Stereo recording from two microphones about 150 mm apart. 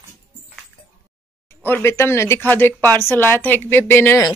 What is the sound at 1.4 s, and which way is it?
Speech, 15° left (ahead or behind).